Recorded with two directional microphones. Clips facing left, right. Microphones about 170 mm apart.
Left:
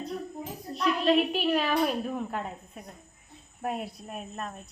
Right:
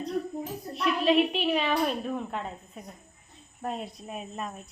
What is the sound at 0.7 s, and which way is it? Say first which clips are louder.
Speech: even; centre (ahead or behind).